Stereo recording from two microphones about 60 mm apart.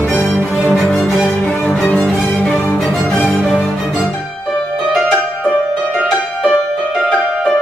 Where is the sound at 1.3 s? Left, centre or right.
Left.